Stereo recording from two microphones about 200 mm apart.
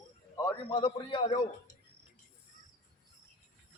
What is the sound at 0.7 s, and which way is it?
Speech, 25° left (ahead or behind).